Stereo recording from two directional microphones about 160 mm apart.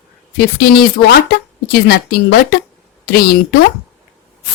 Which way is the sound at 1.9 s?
80° left.